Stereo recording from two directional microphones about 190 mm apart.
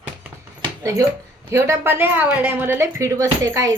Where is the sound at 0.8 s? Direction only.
15° right (ahead or behind).